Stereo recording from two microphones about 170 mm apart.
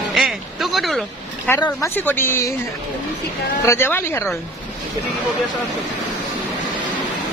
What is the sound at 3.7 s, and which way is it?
Speech, 15° left (ahead or behind).